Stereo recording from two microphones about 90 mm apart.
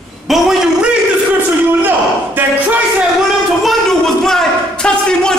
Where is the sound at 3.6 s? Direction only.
5° left (ahead or behind).